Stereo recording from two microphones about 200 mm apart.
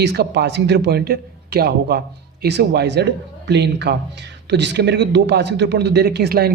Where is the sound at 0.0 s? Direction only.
55° right (ahead or behind).